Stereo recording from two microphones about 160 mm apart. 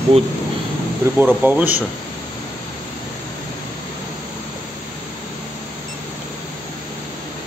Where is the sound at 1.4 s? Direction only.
10° right (ahead or behind).